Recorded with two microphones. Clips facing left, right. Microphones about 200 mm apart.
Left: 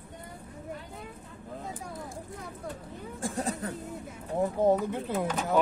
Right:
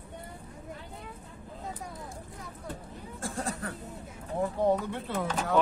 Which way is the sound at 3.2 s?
20° left (ahead or behind).